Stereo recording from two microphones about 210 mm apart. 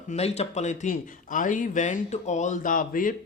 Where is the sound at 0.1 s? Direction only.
30° left (ahead or behind).